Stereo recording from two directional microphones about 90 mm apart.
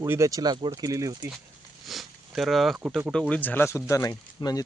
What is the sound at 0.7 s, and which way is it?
Speech, 40° right (ahead or behind).